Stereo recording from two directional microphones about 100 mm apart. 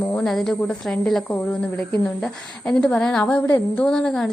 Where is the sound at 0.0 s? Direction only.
20° left (ahead or behind).